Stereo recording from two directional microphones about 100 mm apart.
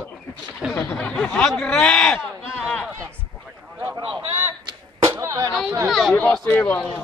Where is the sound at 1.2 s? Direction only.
5° left (ahead or behind).